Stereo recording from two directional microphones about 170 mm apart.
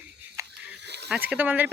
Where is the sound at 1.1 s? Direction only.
5° right (ahead or behind).